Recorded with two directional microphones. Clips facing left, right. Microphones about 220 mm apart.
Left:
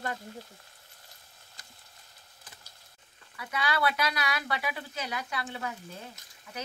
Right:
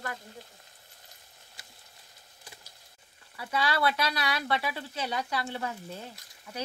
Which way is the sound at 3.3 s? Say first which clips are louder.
Right 2 dB; 30° right (ahead or behind).